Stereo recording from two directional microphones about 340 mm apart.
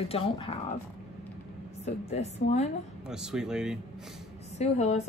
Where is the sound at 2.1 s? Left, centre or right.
Centre.